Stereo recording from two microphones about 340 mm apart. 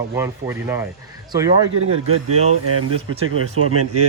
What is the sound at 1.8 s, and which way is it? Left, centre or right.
Speech, right.